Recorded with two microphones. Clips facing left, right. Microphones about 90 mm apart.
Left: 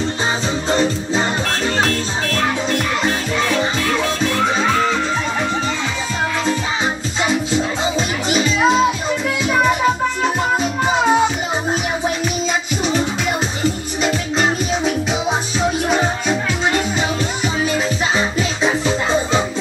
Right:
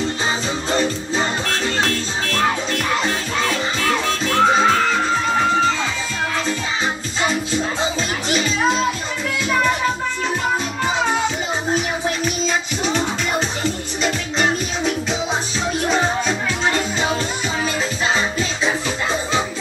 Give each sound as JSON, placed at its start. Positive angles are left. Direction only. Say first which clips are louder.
{"t": 8.3, "sound": "music", "louder": "left 4 dB", "side_deg": 20}